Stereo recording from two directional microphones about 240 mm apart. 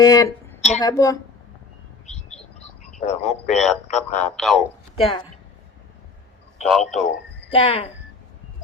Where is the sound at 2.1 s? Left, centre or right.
Left.